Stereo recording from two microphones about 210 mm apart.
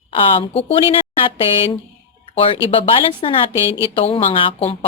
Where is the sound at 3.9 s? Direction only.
25° left (ahead or behind).